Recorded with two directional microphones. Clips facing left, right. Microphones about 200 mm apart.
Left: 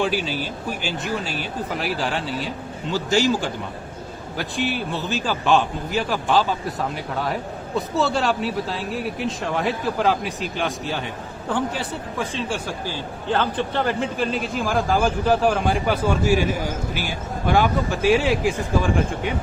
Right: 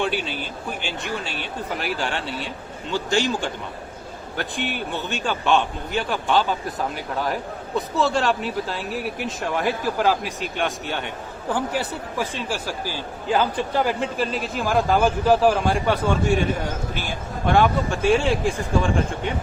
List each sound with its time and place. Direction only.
0.0 s a man's voice: 5° left (ahead or behind)
0.3 s speech: 40° left (ahead or behind)
2.9 s a man's voice: 5° left (ahead or behind)
4.4 s a man's voice: centre (ahead or behind)